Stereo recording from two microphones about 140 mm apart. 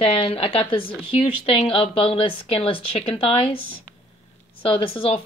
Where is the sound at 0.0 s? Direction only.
40° left (ahead or behind).